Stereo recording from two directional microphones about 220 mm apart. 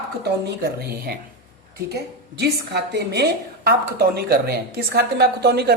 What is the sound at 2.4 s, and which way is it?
A woman's voice, 50° right (ahead or behind).